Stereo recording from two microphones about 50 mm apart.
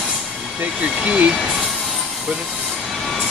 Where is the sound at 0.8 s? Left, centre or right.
Right.